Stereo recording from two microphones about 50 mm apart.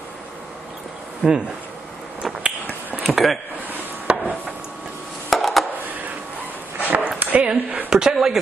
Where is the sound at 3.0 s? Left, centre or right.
Centre.